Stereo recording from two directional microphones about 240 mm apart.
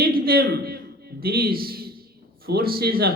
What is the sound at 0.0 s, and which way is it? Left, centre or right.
A man's voice, right.